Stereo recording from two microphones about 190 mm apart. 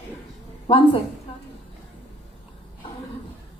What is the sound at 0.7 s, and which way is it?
Speech, 30° left (ahead or behind).